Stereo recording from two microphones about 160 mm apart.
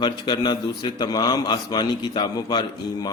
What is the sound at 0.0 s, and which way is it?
A man's voice, 25° left (ahead or behind).